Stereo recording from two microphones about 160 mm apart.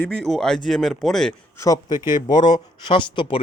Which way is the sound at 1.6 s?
20° left (ahead or behind).